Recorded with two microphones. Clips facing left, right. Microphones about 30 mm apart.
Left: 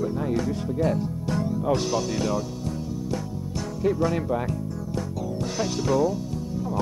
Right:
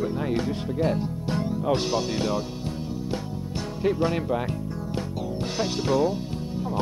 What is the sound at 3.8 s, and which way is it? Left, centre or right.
Speech, right.